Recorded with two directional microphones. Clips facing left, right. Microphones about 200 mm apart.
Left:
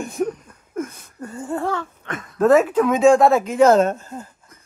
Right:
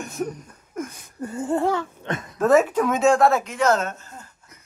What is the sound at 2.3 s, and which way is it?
Speech, 5° right (ahead or behind).